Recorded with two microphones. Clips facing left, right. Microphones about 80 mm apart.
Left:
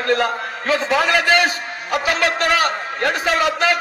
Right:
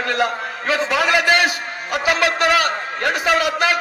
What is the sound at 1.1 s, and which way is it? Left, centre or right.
Speech, right.